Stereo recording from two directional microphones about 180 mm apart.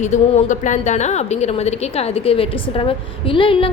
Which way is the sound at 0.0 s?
40° left (ahead or behind).